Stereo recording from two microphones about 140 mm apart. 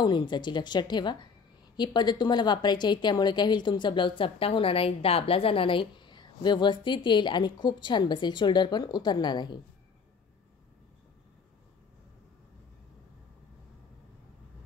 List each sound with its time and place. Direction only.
0.0 s a woman's voice: 30° left (ahead or behind)